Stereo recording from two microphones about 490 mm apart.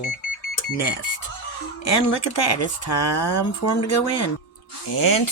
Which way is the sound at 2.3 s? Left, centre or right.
Left.